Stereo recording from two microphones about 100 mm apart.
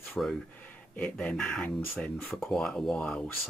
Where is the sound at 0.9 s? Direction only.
10° left (ahead or behind).